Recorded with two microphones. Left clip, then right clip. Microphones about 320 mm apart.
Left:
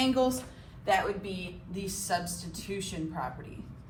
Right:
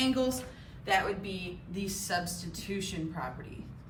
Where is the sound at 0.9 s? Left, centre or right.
Centre.